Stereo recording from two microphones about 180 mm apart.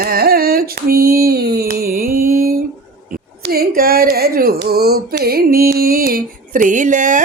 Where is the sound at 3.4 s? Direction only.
55° right (ahead or behind).